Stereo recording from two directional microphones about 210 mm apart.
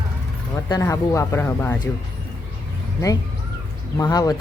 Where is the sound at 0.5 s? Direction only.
15° left (ahead or behind).